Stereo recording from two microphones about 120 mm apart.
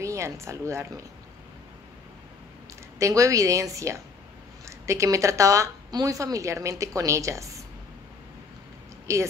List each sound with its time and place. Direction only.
0.0 s speech: 25° right (ahead or behind)
3.0 s speech: 25° right (ahead or behind)
9.0 s speech: 25° right (ahead or behind)